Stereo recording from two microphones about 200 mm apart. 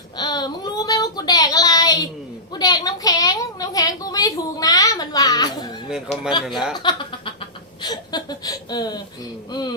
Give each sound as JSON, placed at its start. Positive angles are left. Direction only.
{"t": 0.2, "sound": "child singing", "side_deg": 20}
{"t": 2.5, "sound": "a woman's voice", "side_deg": 20}
{"t": 6.5, "sound": "speech", "side_deg": -5}
{"t": 6.7, "sound": "speech", "side_deg": 25}
{"t": 9.5, "sound": "a sound", "side_deg": 20}